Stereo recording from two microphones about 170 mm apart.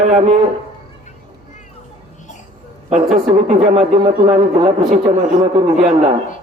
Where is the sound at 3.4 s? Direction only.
35° right (ahead or behind).